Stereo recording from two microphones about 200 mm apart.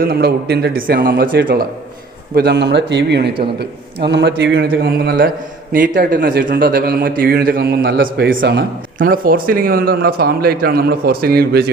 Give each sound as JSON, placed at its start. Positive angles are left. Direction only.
{"t": 0.0, "sound": "speech", "side_deg": -50}
{"t": 8.4, "sound": "speech", "side_deg": -60}
{"t": 9.0, "sound": "speech", "side_deg": -45}